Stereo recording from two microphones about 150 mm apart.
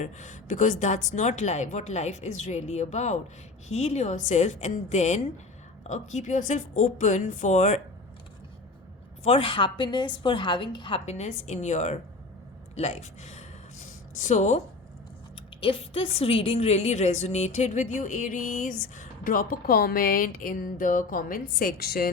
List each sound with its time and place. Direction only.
0.0 s speech: 55° left (ahead or behind)
9.2 s a woman's voice: 40° left (ahead or behind)
11.0 s speech: 50° left (ahead or behind)
15.6 s a woman's voice: 35° left (ahead or behind); by 22.1 s 90° left